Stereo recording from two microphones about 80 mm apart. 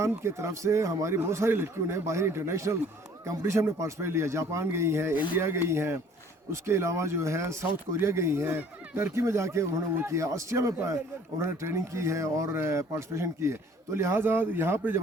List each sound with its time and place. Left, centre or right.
0.2 s speech: right